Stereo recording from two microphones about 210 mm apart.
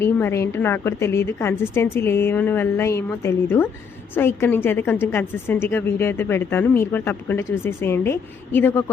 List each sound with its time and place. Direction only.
0.0 s a woman's voice: 10° left (ahead or behind)